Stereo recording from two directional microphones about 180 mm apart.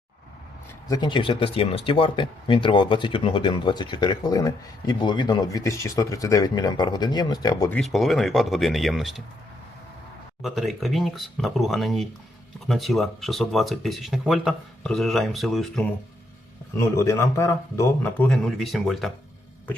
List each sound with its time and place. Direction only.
0.9 s speech: 25° left (ahead or behind)
7.7 s speech: centre (ahead or behind)
10.4 s speech: centre (ahead or behind)
16.7 s speech: 15° left (ahead or behind)
18.3 s speech: centre (ahead or behind)